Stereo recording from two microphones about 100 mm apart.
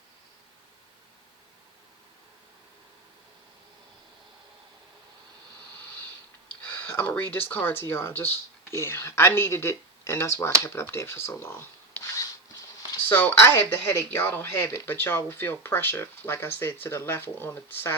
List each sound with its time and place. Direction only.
6.6 s speech: 20° left (ahead or behind)